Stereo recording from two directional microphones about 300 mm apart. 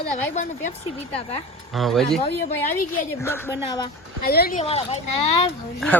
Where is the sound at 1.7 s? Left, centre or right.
Centre.